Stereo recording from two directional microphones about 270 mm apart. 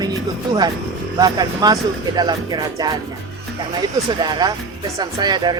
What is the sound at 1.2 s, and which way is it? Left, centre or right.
Speech, centre.